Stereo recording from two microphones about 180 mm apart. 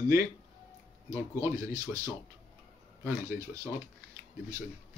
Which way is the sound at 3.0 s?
15° right (ahead or behind).